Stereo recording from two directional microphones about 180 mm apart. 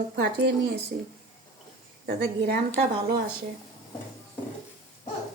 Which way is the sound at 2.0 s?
65° right (ahead or behind).